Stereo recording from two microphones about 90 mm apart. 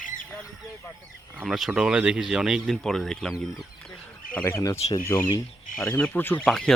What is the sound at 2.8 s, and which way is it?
Speech, 5° left (ahead or behind).